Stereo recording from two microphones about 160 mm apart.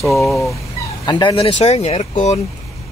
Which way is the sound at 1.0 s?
30° left (ahead or behind).